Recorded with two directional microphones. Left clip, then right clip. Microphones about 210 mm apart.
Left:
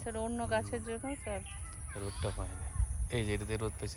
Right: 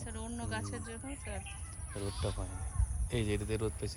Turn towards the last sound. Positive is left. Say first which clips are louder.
# right 2 dB
turn(degrees=-10)  # may be behind; listen again after turning